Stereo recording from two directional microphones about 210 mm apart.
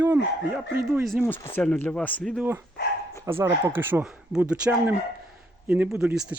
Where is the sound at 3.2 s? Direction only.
10° right (ahead or behind).